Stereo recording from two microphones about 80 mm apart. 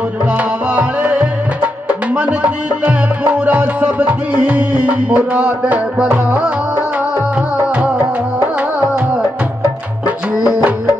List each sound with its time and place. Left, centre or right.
0.4 s music: centre
7.5 s music: centre
10.0 s music: centre